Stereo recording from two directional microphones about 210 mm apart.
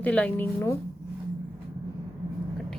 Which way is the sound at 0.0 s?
5° left (ahead or behind).